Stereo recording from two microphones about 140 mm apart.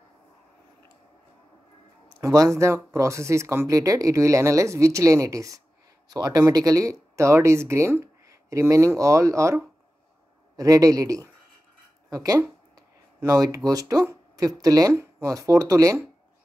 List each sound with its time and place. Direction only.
2.1 s speech: 25° right (ahead or behind)